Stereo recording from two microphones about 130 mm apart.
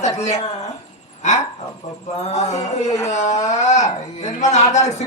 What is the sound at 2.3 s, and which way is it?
Speech, 60° left (ahead or behind).